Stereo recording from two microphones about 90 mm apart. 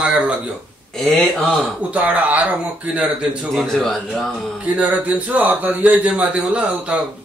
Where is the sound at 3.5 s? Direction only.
Centre (ahead or behind).